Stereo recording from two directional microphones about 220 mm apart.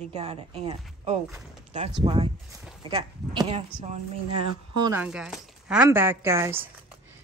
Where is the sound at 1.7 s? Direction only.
25° right (ahead or behind).